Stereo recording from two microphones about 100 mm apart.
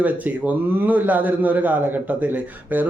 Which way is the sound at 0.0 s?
15° right (ahead or behind).